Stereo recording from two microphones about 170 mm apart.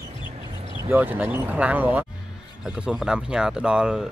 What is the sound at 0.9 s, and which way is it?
Speech, 10° right (ahead or behind).